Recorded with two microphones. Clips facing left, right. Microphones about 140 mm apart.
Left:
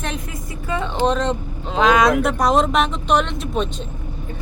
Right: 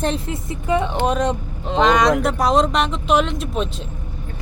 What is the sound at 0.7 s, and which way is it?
Speech, 20° right (ahead or behind).